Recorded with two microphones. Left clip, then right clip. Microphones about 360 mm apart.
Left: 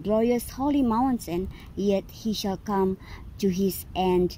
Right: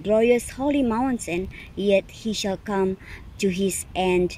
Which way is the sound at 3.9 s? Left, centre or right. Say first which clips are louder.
Right 2 dB; centre.